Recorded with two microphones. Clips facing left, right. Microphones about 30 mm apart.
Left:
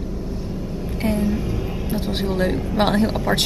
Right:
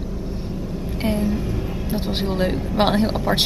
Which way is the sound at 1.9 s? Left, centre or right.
Right.